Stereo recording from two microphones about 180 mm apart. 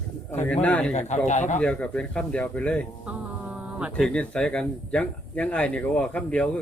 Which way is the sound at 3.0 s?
5° right (ahead or behind).